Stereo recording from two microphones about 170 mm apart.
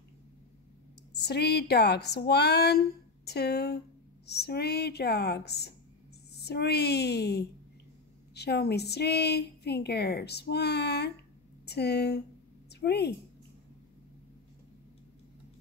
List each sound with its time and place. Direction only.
1.2 s a woman's voice: 75° left (ahead or behind)